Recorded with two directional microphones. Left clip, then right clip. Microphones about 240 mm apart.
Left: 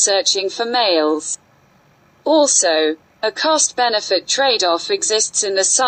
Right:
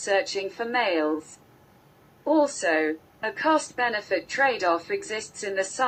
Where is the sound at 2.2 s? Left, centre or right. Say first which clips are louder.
Left 9 dB; left.